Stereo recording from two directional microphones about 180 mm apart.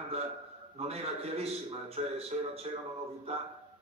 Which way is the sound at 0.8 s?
35° right (ahead or behind).